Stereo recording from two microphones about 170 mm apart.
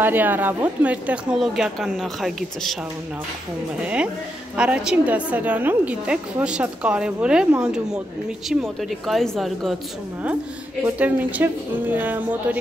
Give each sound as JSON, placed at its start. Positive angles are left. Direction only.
{"t": 0.0, "sound": "speech", "side_deg": -10}
{"t": 3.8, "sound": "a woman's voice", "side_deg": -5}
{"t": 11.0, "sound": "a woman's voice", "side_deg": -10}